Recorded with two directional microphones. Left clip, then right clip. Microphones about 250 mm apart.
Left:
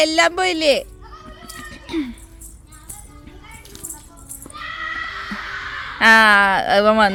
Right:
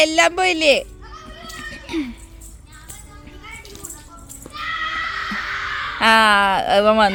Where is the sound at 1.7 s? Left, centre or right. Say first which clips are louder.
Left 1 dB; centre.